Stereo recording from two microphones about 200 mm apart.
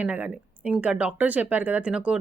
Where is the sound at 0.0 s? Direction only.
10° right (ahead or behind).